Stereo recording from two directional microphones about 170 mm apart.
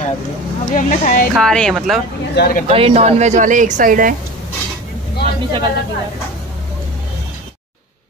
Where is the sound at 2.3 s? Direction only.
60° left (ahead or behind).